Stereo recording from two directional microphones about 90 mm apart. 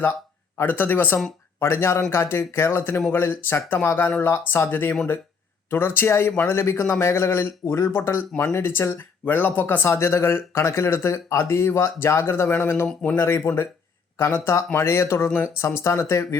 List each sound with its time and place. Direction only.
0.0 s speech: 25° left (ahead or behind)